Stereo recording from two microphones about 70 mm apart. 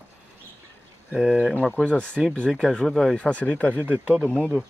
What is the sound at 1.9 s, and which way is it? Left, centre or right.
Speech, centre.